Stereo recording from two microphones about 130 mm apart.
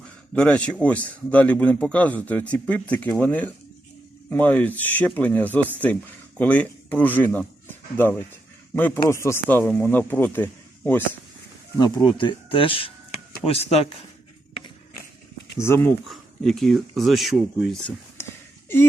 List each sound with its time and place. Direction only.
0.3 s a man's voice: 10° left (ahead or behind)
9.0 s a man's voice: 20° left (ahead or behind)
11.8 s speech: 40° left (ahead or behind)
15.5 s speech: 20° left (ahead or behind)
15.8 s speech: centre (ahead or behind)
18.2 s a sound: 20° left (ahead or behind)